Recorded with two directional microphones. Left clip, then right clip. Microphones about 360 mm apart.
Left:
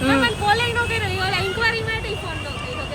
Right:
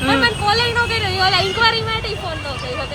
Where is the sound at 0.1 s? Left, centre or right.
Centre.